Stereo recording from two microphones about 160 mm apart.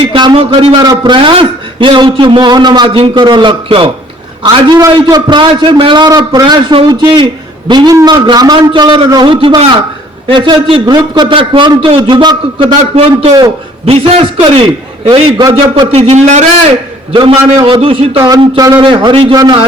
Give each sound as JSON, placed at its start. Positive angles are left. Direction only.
{"t": 0.0, "sound": "a man's voice", "side_deg": -35}
{"t": 0.8, "sound": "a man's voice", "side_deg": -25}
{"t": 17.1, "sound": "a man's voice", "side_deg": -35}
{"t": 17.7, "sound": "a man's voice", "side_deg": -40}
{"t": 18.3, "sound": "a man's voice", "side_deg": -25}